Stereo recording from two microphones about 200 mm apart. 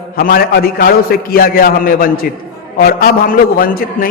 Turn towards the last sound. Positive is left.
turn(degrees=45)  # may be behind; listen again after turning